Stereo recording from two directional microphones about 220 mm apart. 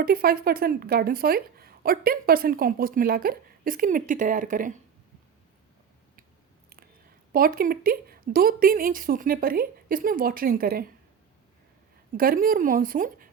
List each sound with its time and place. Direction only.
0.0 s speech: 40° right (ahead or behind)
7.3 s speech: 40° right (ahead or behind)
12.1 s speech: 40° right (ahead or behind)